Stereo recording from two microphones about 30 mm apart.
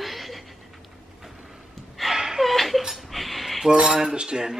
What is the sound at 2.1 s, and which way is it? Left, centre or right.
Gasp, centre.